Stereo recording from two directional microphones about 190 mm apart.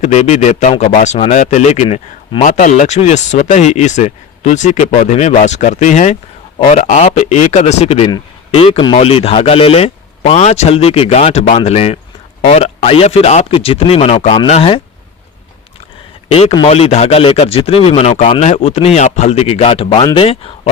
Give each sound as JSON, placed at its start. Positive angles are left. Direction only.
{"t": 0.0, "sound": "speech", "side_deg": 35}
{"t": 16.3, "sound": "speech", "side_deg": 30}